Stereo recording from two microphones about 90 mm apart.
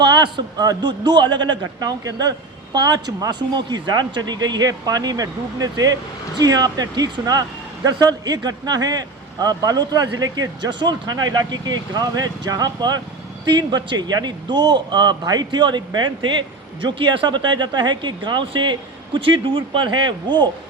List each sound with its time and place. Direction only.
0.0 s speech: 55° right (ahead or behind)
16.8 s speech: 70° right (ahead or behind)